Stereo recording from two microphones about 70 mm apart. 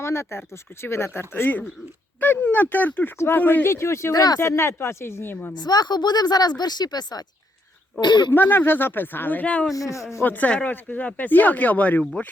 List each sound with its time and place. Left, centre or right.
0.0 s speech: left
3.7 s speech: left
4.1 s speech: left
4.4 s speech: left
5.5 s a woman's voice: left
8.0 s speech: left
8.3 s speech: left
9.7 s speech: left
10.2 s speech: left